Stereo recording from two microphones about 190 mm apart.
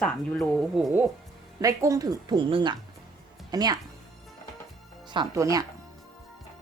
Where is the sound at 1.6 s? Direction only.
20° right (ahead or behind).